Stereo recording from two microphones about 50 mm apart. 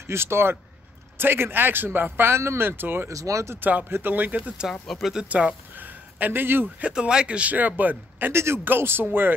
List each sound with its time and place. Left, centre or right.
0.0 s a man's voice: right
2.1 s a man's voice: right
3.1 s speech: right
3.9 s speech: right
4.8 s speech: centre
5.3 s speech: right
5.8 s a sound: right
6.8 s speech: centre; by 8.3 s right
8.3 s speech: right
8.6 s a man's voice: right